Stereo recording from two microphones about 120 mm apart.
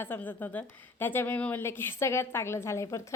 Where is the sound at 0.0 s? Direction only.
15° left (ahead or behind).